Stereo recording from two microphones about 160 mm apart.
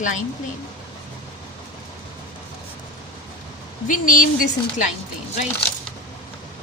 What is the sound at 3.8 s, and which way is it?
A woman's voice, 55° left (ahead or behind).